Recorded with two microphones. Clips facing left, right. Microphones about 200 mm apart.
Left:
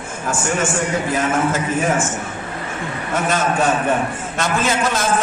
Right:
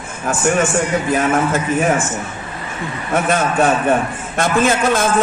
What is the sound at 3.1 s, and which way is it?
Speech, 55° right (ahead or behind).